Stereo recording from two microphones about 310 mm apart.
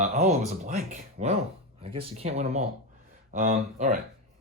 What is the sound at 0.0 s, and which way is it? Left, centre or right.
Speech, right.